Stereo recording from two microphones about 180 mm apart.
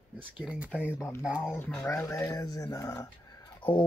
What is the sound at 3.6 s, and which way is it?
Speech, 30° left (ahead or behind).